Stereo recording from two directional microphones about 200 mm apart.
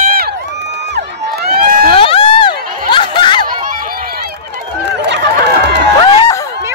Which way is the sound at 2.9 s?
25° left (ahead or behind).